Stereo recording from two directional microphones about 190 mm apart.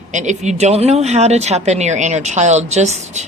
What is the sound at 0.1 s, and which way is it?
A woman's voice, 40° right (ahead or behind).